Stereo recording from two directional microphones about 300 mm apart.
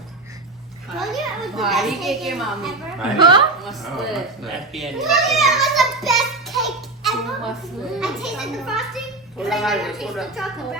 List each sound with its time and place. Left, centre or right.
0.9 s a woman's voice: centre
3.2 s a woman's voice: centre
3.6 s a child's voice: centre